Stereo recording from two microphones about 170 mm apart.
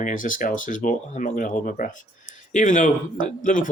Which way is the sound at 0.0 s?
50° left (ahead or behind).